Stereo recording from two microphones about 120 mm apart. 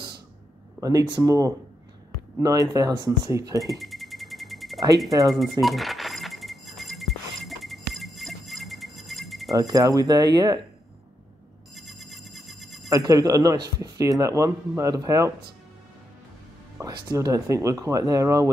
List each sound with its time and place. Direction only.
0.7 s speech: 30° right (ahead or behind)
3.6 s a sound: centre (ahead or behind)
9.6 s speech: 30° right (ahead or behind)
11.7 s a sound: centre (ahead or behind)
12.9 s speech: 30° right (ahead or behind)
16.8 s speech: 30° right (ahead or behind)